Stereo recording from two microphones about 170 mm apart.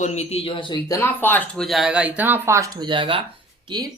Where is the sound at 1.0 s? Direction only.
10° left (ahead or behind); by 3.9 s 25° right (ahead or behind).